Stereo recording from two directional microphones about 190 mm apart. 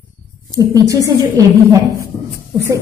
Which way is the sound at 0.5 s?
20° right (ahead or behind).